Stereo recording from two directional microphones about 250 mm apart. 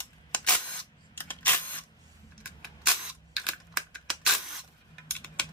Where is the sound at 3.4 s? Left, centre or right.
Centre.